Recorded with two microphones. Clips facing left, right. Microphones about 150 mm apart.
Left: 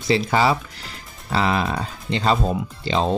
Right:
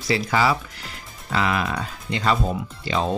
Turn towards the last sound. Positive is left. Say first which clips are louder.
# left 3 dB
turn(degrees=25)  # may be behind; listen again after turning